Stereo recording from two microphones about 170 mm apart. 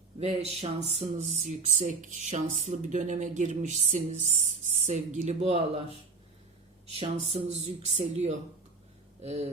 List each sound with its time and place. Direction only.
0.3 s speech: 40° right (ahead or behind)
6.9 s speech: 35° right (ahead or behind)